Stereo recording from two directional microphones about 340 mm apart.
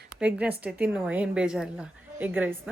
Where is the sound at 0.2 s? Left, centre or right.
Centre.